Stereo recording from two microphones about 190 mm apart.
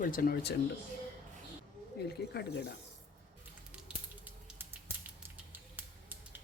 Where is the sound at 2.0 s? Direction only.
60° left (ahead or behind).